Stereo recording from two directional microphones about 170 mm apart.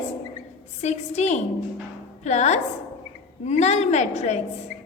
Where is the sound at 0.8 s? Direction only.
40° left (ahead or behind).